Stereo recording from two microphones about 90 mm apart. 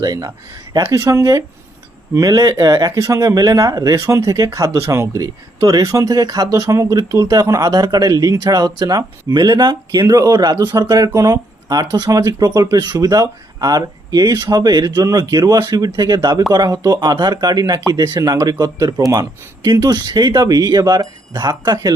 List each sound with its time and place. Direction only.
0.0 s speech: 40° right (ahead or behind); by 10.1 s 60° right (ahead or behind)
10.1 s speech: 45° right (ahead or behind)
11.7 s speech: 50° right (ahead or behind)
12.0 s speech: 40° right (ahead or behind)